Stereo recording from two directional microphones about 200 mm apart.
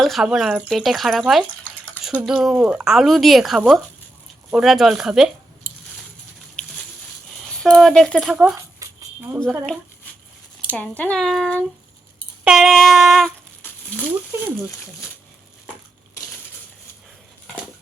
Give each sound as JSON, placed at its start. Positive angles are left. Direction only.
{"t": 0.0, "sound": "speech", "side_deg": 0}
{"t": 7.6, "sound": "speech", "side_deg": 0}
{"t": 8.8, "sound": "a sound", "side_deg": -15}
{"t": 9.3, "sound": "speech", "side_deg": 0}
{"t": 10.7, "sound": "speech", "side_deg": 10}
{"t": 14.3, "sound": "speech", "side_deg": -15}